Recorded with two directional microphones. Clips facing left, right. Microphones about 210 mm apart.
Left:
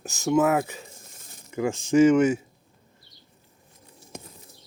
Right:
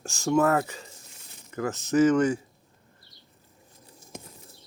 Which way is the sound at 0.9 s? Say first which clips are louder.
Left 2 dB; 45° left (ahead or behind).